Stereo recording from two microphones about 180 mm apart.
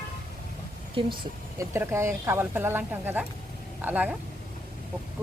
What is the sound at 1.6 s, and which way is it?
Speech, 15° right (ahead or behind).